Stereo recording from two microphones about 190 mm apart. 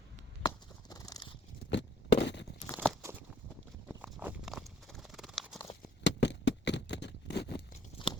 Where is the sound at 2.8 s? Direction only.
5° left (ahead or behind).